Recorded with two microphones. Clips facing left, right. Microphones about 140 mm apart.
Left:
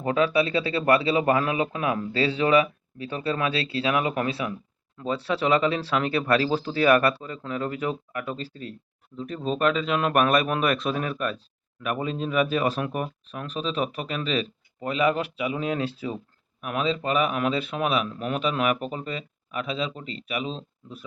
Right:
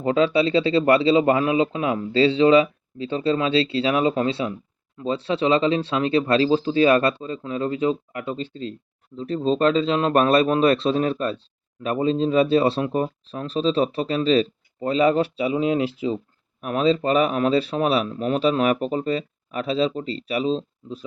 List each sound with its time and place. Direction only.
0.0 s speech: 25° right (ahead or behind)
16.6 s a man's voice: 35° right (ahead or behind)